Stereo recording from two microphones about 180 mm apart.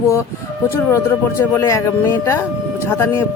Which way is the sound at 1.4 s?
15° left (ahead or behind).